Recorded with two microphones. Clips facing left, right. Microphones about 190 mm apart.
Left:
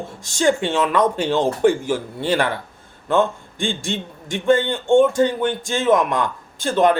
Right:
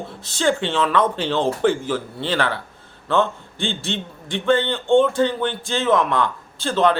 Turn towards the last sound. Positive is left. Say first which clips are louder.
# left 2 dB
turn(degrees=15)  # may be behind; listen again after turning